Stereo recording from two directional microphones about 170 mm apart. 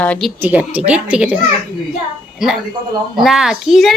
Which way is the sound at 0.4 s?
10° right (ahead or behind).